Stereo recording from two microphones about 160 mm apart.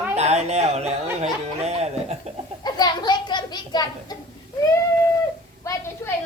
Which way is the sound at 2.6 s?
25° left (ahead or behind).